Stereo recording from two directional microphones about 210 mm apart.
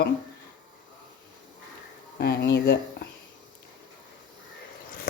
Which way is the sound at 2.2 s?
50° left (ahead or behind).